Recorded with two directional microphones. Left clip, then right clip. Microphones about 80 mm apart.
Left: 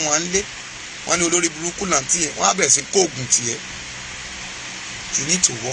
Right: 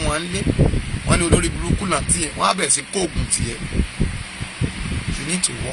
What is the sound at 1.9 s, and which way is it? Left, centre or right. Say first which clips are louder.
Speech: left 3 dB; right.